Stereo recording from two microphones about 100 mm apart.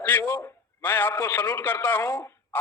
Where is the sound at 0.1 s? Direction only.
25° left (ahead or behind).